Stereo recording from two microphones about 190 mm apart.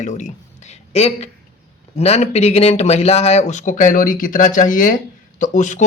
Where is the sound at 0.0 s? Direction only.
40° left (ahead or behind).